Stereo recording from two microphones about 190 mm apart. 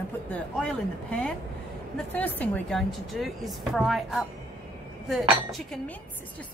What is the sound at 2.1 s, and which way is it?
Speech, 10° left (ahead or behind).